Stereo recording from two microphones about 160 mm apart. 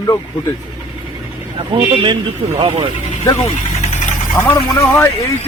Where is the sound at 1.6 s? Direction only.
30° right (ahead or behind).